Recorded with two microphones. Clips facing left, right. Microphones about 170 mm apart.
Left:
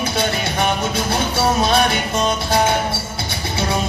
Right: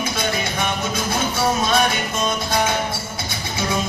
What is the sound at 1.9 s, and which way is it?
Music, 65° left (ahead or behind).